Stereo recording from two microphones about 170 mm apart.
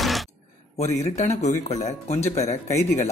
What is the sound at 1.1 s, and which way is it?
A man's voice, 45° left (ahead or behind).